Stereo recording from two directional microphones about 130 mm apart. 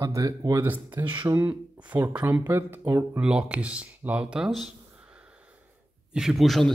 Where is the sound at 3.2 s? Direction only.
5° right (ahead or behind).